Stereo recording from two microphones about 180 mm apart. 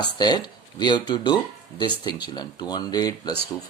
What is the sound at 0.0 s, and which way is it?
Speech, 25° left (ahead or behind).